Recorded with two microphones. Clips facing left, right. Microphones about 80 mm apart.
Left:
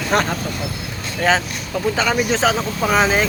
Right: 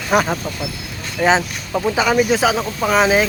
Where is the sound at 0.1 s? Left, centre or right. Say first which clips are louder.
Right 3 dB; centre.